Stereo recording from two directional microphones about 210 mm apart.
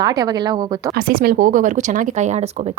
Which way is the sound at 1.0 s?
45° right (ahead or behind).